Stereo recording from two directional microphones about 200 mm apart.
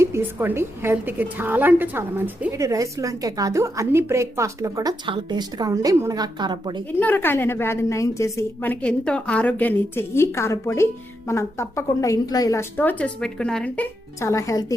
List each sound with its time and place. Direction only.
0.0 s a woman's voice: 10° right (ahead or behind)
7.0 s a woman's voice: 10° left (ahead or behind)
14.2 s a woman's voice: 15° left (ahead or behind)